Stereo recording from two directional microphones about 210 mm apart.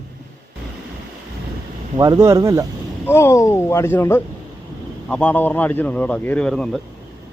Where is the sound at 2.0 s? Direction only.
15° right (ahead or behind).